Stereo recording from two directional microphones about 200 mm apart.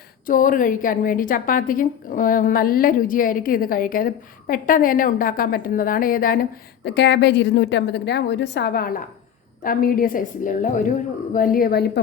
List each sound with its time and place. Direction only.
0.3 s a woman's voice: 40° left (ahead or behind)